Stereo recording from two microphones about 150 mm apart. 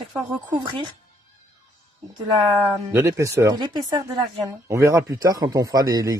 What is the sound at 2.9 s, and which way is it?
A man's voice, 15° right (ahead or behind).